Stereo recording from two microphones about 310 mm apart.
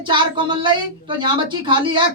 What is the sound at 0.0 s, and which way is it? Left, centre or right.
A woman's voice, centre.